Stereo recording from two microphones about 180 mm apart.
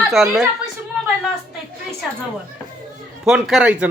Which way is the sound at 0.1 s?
Centre (ahead or behind).